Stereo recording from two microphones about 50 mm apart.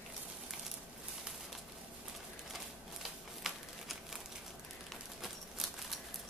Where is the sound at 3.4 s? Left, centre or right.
Centre.